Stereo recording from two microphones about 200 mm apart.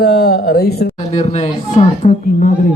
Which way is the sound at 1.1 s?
35° left (ahead or behind).